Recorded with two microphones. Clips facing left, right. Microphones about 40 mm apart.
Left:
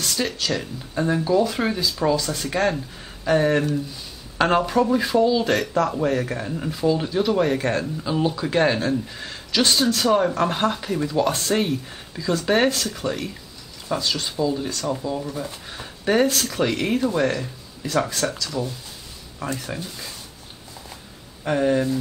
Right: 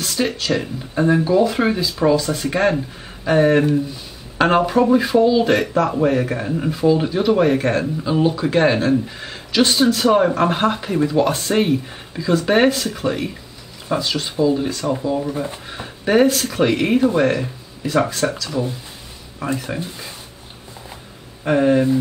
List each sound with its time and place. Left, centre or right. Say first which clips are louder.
0.4 s speech: right 5 dB; centre
21.5 s speech: right 5 dB; centre